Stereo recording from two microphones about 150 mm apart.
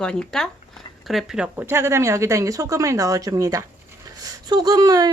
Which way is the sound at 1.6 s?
15° right (ahead or behind).